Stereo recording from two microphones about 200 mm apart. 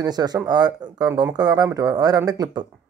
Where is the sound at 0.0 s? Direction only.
20° right (ahead or behind).